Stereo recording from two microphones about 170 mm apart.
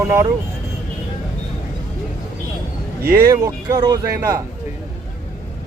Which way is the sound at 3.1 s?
20° right (ahead or behind).